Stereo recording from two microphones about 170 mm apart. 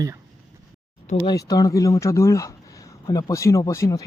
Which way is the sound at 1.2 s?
20° left (ahead or behind).